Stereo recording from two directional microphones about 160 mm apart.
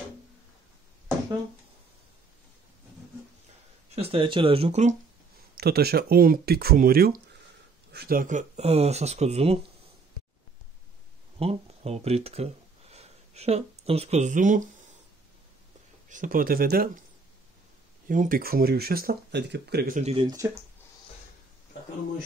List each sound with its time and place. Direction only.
3.9 s speech: 35° right (ahead or behind)
5.6 s speech: 80° right
7.9 s speech: 80° right; by 9.6 s 40° right (ahead or behind)
11.3 s speech: 40° right (ahead or behind)
16.1 s speech: 60° right (ahead or behind)
18.0 s speech: 55° right (ahead or behind); by 20.0 s 85° right
20.0 s speech: 40° right (ahead or behind)
20.2 s speech: 20° right (ahead or behind)